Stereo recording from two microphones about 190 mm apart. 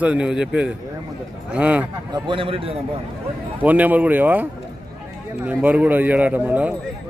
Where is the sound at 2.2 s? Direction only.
25° right (ahead or behind).